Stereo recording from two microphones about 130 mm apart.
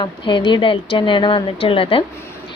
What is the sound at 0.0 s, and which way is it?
A woman's voice, 35° left (ahead or behind).